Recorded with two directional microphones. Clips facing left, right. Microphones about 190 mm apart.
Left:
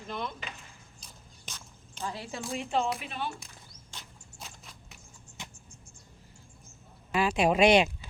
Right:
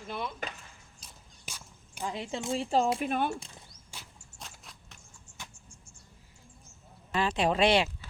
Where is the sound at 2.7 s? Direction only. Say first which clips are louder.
Right 4 dB; 40° right (ahead or behind).